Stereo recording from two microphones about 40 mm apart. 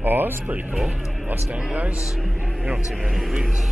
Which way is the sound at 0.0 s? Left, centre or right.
Right.